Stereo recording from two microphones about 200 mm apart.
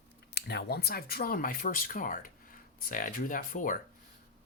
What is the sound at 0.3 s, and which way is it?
Speech, 55° left (ahead or behind).